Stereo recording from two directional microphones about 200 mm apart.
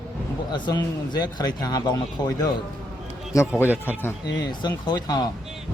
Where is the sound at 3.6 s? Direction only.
10° left (ahead or behind).